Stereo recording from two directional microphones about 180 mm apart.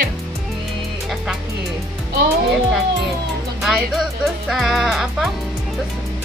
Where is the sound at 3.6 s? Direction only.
Centre (ahead or behind).